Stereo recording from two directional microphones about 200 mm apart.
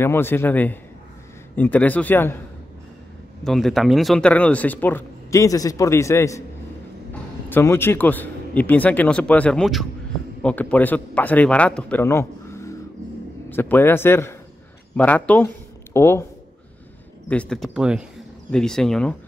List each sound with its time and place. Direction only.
0.0 s speech: 10° left (ahead or behind)
3.4 s speech: centre (ahead or behind)
7.4 s speech: 10° left (ahead or behind)
17.3 s speech: 5° left (ahead or behind)